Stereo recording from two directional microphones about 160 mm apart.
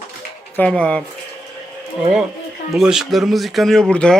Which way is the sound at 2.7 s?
Centre (ahead or behind).